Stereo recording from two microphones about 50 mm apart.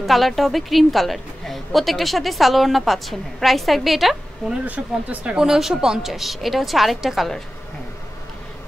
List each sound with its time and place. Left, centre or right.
0.0 s a woman's voice: centre
4.6 s speech: right
5.2 s a woman's voice: centre